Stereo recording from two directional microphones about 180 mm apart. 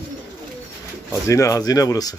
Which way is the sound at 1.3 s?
20° left (ahead or behind).